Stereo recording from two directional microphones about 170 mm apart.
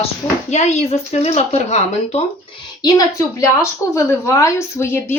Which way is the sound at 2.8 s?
20° left (ahead or behind).